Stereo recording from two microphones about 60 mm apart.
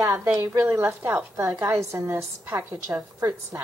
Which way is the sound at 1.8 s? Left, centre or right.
Right.